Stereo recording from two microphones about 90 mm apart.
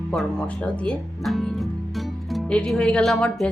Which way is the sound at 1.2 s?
Centre (ahead or behind).